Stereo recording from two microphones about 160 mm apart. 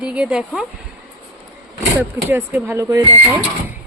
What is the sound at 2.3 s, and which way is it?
Speech, 15° right (ahead or behind).